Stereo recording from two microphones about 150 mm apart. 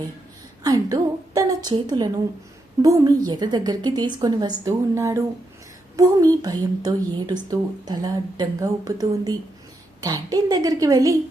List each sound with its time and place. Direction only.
0.6 s a woman's voice: 25° right (ahead or behind)